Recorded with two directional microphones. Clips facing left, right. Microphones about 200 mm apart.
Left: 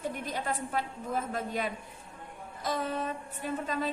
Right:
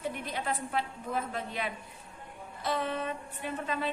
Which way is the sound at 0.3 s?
45° left (ahead or behind).